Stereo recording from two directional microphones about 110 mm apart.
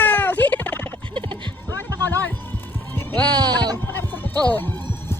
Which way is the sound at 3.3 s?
40° right (ahead or behind).